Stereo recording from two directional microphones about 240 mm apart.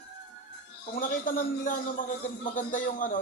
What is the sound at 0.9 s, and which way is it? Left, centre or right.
A man's voice, left.